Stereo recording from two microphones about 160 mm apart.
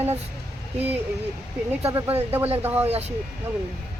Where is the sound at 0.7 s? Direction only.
10° right (ahead or behind).